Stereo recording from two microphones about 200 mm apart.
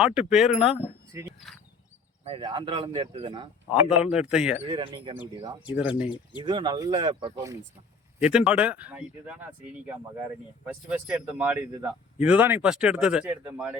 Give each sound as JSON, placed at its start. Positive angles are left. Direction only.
{"t": 0.0, "sound": "a man's voice", "side_deg": -5}
{"t": 2.2, "sound": "speech", "side_deg": -25}
{"t": 4.0, "sound": "a man's voice", "side_deg": -5}
{"t": 4.6, "sound": "speech", "side_deg": -30}
{"t": 5.7, "sound": "speech", "side_deg": -5}
{"t": 6.4, "sound": "speech", "side_deg": -20}
{"t": 8.2, "sound": "speech", "side_deg": -5}
{"t": 10.8, "sound": "a man's voice", "side_deg": -5}